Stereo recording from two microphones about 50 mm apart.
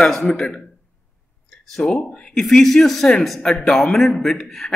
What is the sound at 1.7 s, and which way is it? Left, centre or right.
A man's voice, centre.